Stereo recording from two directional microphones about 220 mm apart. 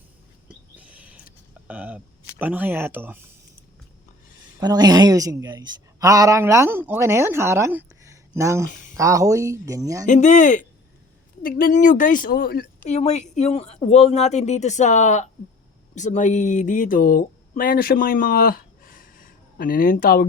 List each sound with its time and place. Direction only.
0.4 s a sound: 5° right (ahead or behind)
1.6 s a woman's voice: 5° right (ahead or behind)
4.6 s a woman's voice: 20° right (ahead or behind)
8.6 s speech: 35° left (ahead or behind)
9.0 s a woman's voice: 15° right (ahead or behind)
10.1 s speech: 35° left (ahead or behind)
12.9 s speech: 30° left (ahead or behind)